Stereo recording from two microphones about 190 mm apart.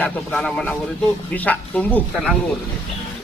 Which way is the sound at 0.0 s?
5° left (ahead or behind).